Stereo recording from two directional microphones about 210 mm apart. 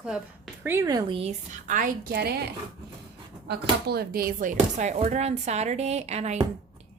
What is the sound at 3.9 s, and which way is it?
Speech, 45° right (ahead or behind).